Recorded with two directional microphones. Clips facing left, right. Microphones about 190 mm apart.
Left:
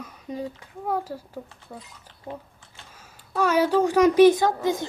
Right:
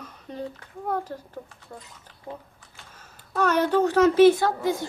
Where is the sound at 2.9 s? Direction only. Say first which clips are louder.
Left 1 dB; 10° left (ahead or behind).